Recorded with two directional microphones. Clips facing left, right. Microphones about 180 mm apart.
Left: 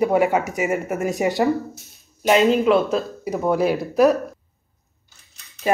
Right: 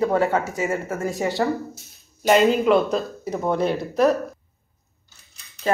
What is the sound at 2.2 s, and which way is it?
Speech, centre (ahead or behind).